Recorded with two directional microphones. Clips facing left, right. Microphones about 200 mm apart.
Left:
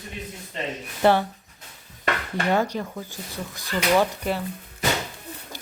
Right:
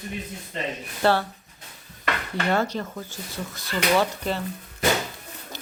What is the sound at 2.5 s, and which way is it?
Speech, 15° left (ahead or behind).